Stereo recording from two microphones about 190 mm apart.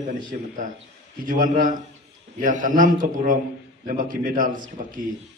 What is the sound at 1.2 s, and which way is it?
A man's voice, 45° right (ahead or behind).